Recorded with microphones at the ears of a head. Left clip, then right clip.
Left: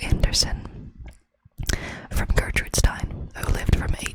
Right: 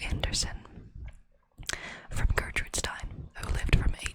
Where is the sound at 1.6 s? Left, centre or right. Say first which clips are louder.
Left 6 dB; left.